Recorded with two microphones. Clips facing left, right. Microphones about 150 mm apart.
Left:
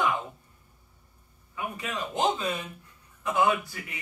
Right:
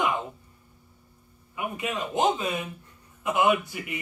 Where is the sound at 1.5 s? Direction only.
20° right (ahead or behind).